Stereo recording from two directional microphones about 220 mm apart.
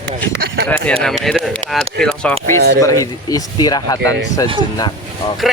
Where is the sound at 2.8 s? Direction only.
15° left (ahead or behind).